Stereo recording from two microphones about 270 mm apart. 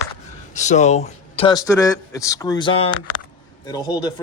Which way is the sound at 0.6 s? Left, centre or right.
Left.